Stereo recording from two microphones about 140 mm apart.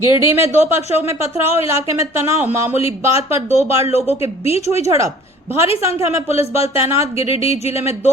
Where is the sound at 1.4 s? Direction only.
20° right (ahead or behind).